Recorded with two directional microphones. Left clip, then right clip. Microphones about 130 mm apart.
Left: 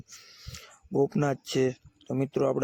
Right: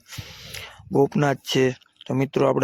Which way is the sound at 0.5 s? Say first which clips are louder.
Right 11 dB; 30° right (ahead or behind).